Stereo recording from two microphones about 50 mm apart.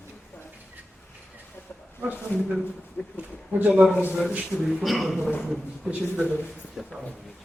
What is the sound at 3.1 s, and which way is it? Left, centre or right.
Speech, right.